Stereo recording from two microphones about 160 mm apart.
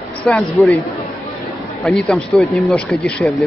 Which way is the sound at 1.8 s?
Centre (ahead or behind).